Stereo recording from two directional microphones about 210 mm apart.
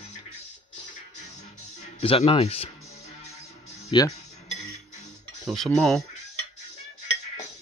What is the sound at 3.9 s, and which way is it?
Speech, 20° left (ahead or behind).